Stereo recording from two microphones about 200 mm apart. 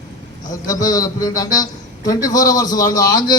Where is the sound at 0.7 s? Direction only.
20° left (ahead or behind).